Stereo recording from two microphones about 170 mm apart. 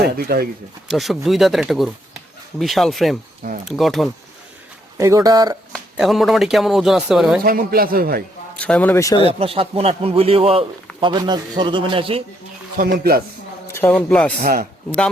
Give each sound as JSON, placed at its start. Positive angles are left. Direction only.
{"t": 0.2, "sound": "a man's voice", "side_deg": -65}
{"t": 0.9, "sound": "speech", "side_deg": 0}
{"t": 4.9, "sound": "a man's voice", "side_deg": -20}
{"t": 6.0, "sound": "speech", "side_deg": 0}
{"t": 7.4, "sound": "a man's voice", "side_deg": -60}
{"t": 8.5, "sound": "a man's voice", "side_deg": 10}
{"t": 9.2, "sound": "a man's voice", "side_deg": -35}
{"t": 12.7, "sound": "a man's voice", "side_deg": -55}
{"t": 13.7, "sound": "a man's voice", "side_deg": 10}
{"t": 14.4, "sound": "a man's voice", "side_deg": -65}